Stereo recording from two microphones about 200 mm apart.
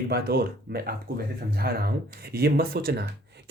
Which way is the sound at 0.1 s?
50° right (ahead or behind).